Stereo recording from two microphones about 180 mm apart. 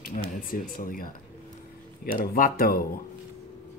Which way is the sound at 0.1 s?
50° left (ahead or behind).